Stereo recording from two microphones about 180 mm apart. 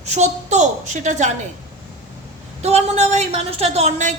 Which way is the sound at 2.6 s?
35° right (ahead or behind).